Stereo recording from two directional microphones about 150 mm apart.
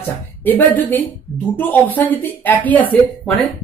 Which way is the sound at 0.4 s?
10° left (ahead or behind).